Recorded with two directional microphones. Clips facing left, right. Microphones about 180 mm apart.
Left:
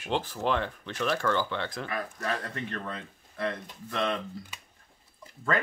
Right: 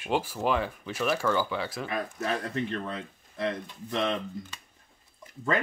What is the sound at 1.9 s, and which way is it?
Speech, 25° right (ahead or behind).